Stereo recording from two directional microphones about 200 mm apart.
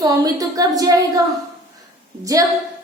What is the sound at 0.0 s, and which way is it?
A woman's voice, 15° right (ahead or behind).